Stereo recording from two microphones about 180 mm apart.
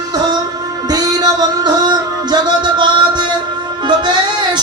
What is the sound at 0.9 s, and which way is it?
Music, 20° right (ahead or behind).